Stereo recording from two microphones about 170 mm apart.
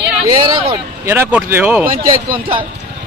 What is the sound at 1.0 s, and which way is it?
Speech, 10° right (ahead or behind).